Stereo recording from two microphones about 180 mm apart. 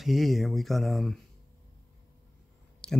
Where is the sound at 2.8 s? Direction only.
5° left (ahead or behind).